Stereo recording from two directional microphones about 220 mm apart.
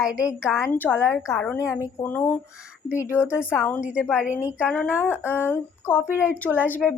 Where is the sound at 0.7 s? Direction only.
10° left (ahead or behind).